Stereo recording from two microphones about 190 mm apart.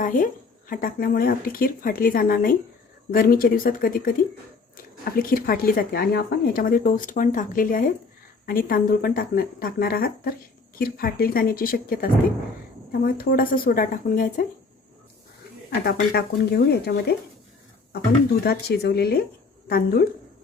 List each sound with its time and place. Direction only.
0.0 s a sound: 45° left (ahead or behind)
0.7 s speech: 50° left (ahead or behind)
15.8 s speech: 55° left (ahead or behind)
18.4 s speech: 55° left (ahead or behind)